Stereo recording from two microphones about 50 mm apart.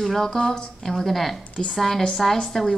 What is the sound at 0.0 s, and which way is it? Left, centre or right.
A woman's voice, centre.